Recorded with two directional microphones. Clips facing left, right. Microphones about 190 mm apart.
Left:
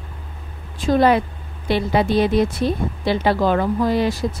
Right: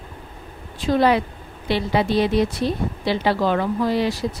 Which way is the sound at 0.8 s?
45° left (ahead or behind).